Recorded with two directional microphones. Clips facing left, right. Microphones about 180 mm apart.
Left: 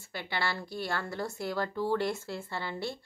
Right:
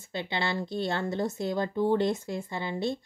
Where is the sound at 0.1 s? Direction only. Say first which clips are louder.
Right 4 dB; 20° right (ahead or behind).